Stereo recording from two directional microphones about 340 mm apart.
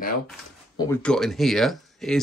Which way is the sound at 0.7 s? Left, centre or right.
Centre.